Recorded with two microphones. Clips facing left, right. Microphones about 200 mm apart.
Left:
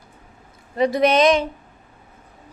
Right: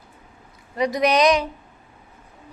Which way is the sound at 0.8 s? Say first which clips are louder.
Left 2 dB; 30° left (ahead or behind).